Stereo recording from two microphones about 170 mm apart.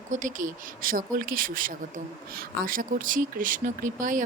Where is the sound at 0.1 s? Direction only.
50° right (ahead or behind).